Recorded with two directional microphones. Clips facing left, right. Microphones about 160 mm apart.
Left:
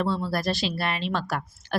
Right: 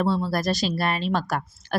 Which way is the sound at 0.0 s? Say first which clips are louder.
Right 3 dB; 40° right (ahead or behind).